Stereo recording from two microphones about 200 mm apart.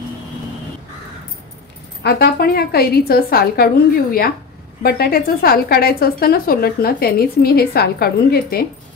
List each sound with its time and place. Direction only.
2.0 s a woman's voice: 50° left (ahead or behind)